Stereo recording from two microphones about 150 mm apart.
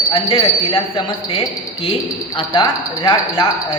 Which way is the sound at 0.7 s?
35° left (ahead or behind).